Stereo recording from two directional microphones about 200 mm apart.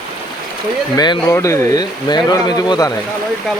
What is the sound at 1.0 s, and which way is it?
Speech, 20° left (ahead or behind).